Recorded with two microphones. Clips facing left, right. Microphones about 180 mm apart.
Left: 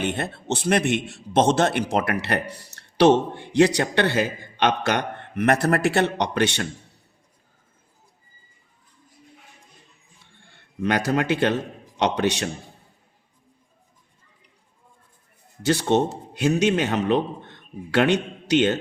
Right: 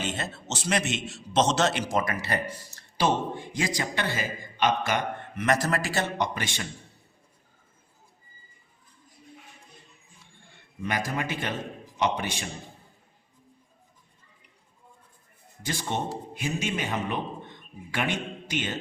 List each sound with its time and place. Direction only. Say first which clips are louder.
0.0 s a man's voice: left 6 dB; 60° left (ahead or behind)
10.8 s a man's voice: left 8 dB; 75° left (ahead or behind)
15.6 s a man's voice: left 11 dB; 75° left (ahead or behind)